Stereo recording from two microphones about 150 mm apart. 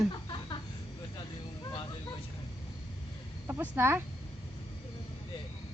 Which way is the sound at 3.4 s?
15° right (ahead or behind).